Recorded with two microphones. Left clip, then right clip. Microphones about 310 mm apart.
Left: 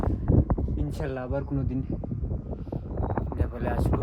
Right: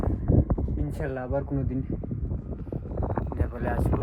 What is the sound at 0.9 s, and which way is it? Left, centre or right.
Speech, centre.